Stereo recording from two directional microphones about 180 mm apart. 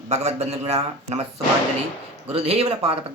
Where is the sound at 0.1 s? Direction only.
40° right (ahead or behind).